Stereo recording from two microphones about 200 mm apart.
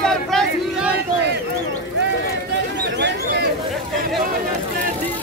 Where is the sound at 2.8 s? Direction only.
60° right (ahead or behind).